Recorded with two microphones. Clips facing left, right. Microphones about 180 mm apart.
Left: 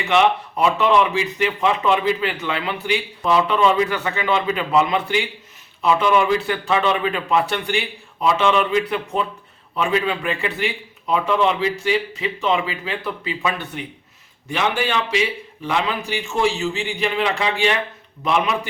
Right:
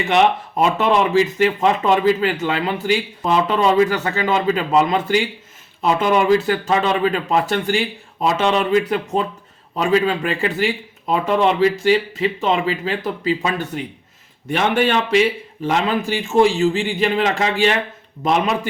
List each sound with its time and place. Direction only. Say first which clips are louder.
0.0 s speech: right 1 dB; 45° right (ahead or behind)
14.5 s a man's voice: right 4 dB; 50° right (ahead or behind)